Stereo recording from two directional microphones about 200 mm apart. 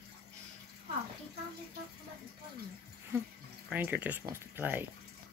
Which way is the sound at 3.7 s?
10° right (ahead or behind).